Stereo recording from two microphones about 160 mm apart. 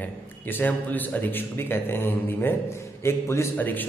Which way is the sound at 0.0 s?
10° left (ahead or behind).